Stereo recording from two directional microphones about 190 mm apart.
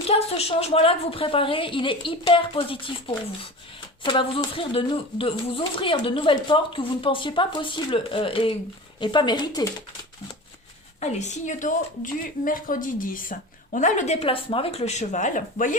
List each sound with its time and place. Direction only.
0.1 s speech: 30° left (ahead or behind)
11.0 s a woman's voice: 35° left (ahead or behind)